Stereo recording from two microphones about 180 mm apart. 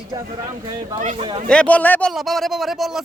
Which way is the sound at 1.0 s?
45° right (ahead or behind).